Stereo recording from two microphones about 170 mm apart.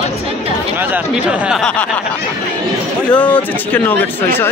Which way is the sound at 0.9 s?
5° right (ahead or behind).